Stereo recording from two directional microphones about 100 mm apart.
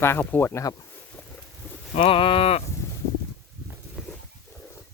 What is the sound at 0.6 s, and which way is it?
Speech, 35° left (ahead or behind).